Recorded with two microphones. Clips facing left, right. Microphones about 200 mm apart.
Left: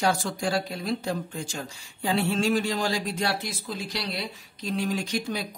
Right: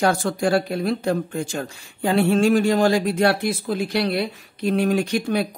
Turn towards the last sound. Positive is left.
turn(degrees=-60)  # may be behind; listen again after turning